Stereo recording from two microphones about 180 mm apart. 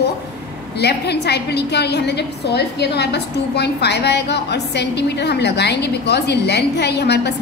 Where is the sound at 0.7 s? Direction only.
65° left (ahead or behind).